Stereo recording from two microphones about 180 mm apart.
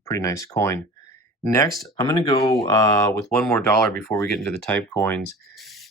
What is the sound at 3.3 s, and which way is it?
Speech, 5° left (ahead or behind).